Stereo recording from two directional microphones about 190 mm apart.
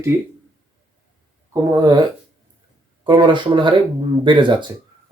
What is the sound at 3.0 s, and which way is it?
Speech, 25° right (ahead or behind).